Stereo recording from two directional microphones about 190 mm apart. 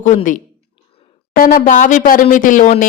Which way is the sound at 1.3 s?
50° left (ahead or behind).